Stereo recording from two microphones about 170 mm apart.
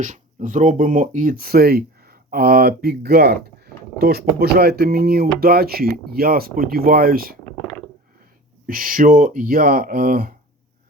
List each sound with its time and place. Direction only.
0.0 s speech: 45° right (ahead or behind)
8.6 s speech: 55° right (ahead or behind)